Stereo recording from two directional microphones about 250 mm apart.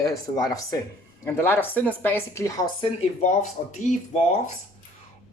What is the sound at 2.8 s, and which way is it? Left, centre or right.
Speech, left.